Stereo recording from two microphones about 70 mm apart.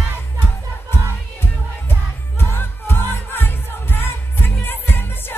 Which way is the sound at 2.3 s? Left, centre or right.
Left.